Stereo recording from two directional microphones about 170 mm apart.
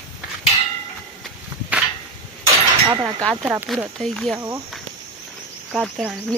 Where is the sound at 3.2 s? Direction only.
5° left (ahead or behind).